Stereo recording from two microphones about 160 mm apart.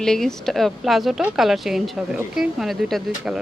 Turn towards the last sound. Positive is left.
turn(degrees=0)  # may be behind; listen again after turning